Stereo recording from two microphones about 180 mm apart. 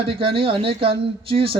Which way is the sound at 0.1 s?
30° right (ahead or behind).